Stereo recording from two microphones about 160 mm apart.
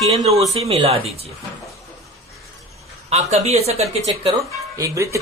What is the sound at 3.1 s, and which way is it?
Speech, 45° right (ahead or behind).